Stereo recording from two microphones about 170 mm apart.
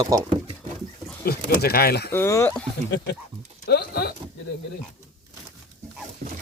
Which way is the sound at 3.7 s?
70° left (ahead or behind).